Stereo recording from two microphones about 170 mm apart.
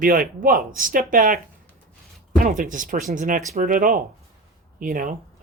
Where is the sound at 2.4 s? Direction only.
50° right (ahead or behind).